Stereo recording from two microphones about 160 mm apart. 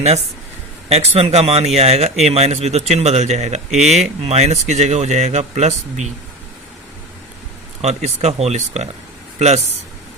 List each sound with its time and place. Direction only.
0.9 s speech: 40° right (ahead or behind)
7.8 s speech: 45° right (ahead or behind)